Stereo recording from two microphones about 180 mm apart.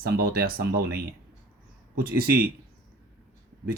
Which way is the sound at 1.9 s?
55° right (ahead or behind).